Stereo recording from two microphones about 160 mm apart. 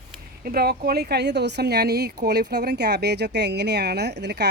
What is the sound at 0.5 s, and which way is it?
Speech, 75° right (ahead or behind).